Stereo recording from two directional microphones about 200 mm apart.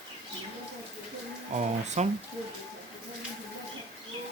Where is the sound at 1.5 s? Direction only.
35° right (ahead or behind).